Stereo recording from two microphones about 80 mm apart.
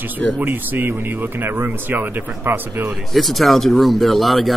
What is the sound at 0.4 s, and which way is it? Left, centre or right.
Speech, right.